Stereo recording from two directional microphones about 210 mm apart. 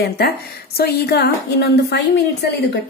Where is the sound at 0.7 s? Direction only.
50° left (ahead or behind).